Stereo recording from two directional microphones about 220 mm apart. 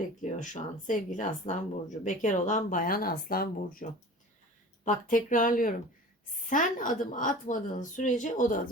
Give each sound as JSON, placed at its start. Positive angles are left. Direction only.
{"t": 0.2, "sound": "speech", "side_deg": 35}
{"t": 4.9, "sound": "speech", "side_deg": 35}